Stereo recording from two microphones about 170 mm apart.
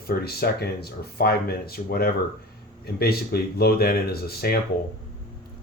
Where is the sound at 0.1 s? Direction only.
65° left (ahead or behind).